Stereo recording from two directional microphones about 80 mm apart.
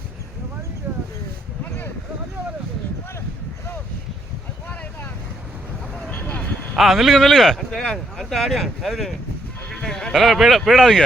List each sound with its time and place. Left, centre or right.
6.1 s vehicle: left
6.7 s speech: centre
9.6 s a sound: centre
10.6 s speech: centre